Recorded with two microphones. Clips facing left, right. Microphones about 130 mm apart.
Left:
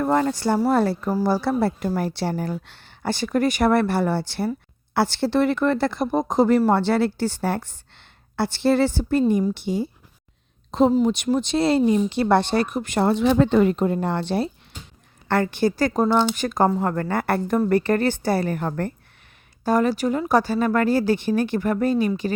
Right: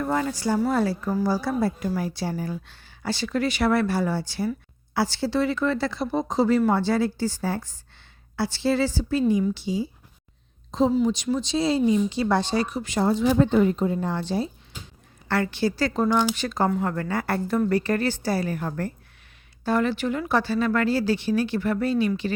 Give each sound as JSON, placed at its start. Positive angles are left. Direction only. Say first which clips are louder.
{"t": 0.0, "sound": "a woman's voice", "louder": "left 5 dB", "side_deg": 50}
{"t": 6.7, "sound": "a woman's voice", "louder": "left 3 dB", "side_deg": 65}
{"t": 15.3, "sound": "a woman's voice", "louder": "left 3 dB", "side_deg": 50}
{"t": 19.6, "sound": "speech", "louder": "left 3 dB", "side_deg": 40}